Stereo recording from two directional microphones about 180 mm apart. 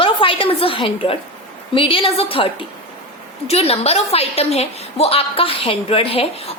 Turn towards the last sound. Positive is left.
turn(degrees=35)  # may be behind; listen again after turning